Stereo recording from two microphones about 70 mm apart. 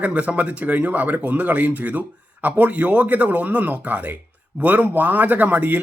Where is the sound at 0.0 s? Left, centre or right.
Centre.